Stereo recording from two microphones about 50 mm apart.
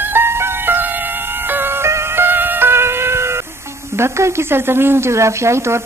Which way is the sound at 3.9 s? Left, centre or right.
Right.